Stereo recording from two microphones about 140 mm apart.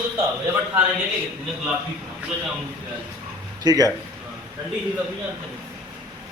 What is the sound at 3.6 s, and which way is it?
Speech, 25° right (ahead or behind).